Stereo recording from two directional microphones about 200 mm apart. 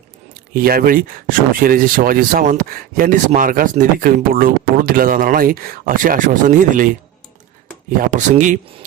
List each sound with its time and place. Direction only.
0.5 s speech: 45° right (ahead or behind)